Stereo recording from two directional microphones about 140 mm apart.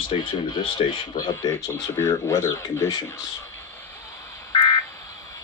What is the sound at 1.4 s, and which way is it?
Speech, 20° left (ahead or behind).